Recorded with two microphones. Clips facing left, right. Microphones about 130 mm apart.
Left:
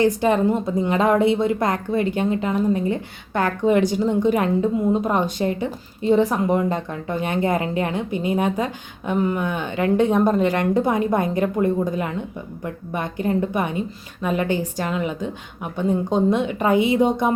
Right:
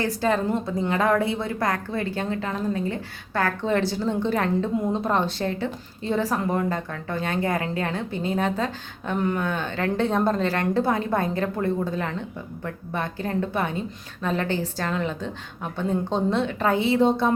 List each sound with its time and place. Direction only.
0.0 s a woman's voice: 20° left (ahead or behind)